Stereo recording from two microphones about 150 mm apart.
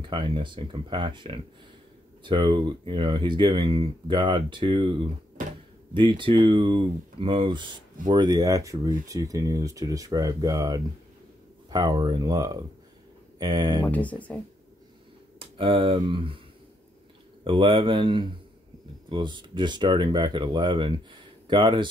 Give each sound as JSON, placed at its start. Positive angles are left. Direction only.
{"t": 0.0, "sound": "speech", "side_deg": -30}
{"t": 13.8, "sound": "speech", "side_deg": 10}
{"t": 15.3, "sound": "speech", "side_deg": -35}
{"t": 17.5, "sound": "speech", "side_deg": -35}